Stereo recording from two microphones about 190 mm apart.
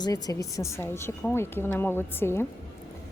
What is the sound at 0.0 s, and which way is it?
Speech, 20° left (ahead or behind).